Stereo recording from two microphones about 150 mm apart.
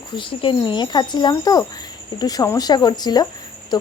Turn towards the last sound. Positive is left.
turn(degrees=30)  # may be behind; listen again after turning